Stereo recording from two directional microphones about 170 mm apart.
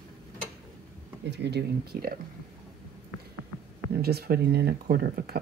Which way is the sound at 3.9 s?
65° right (ahead or behind).